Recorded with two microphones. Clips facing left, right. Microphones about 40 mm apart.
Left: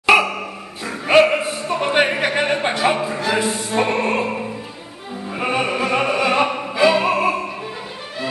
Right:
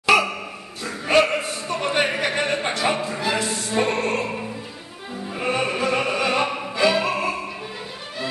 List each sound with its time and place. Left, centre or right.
0.0 s a sound: centre
0.8 s opera: centre
3.3 s music: centre
5.3 s opera: centre